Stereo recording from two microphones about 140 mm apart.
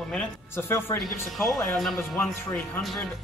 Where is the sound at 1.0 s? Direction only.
Centre (ahead or behind).